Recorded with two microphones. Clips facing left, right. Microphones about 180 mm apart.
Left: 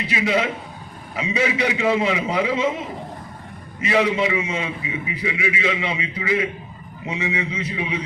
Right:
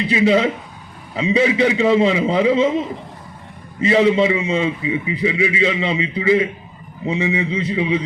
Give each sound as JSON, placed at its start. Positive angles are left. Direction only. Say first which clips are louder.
{"t": 0.1, "sound": "a man's voice", "louder": "right 6 dB", "side_deg": -30}
{"t": 3.8, "sound": "a man's voice", "louder": "right 6 dB", "side_deg": -30}